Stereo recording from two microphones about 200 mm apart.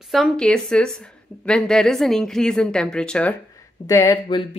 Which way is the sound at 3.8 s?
15° left (ahead or behind).